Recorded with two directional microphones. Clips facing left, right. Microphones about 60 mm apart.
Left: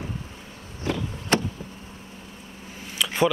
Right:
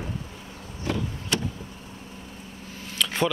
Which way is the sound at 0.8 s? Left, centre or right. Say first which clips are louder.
Left 1 dB; left.